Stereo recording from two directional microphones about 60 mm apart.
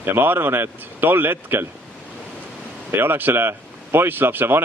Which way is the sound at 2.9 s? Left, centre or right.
Right.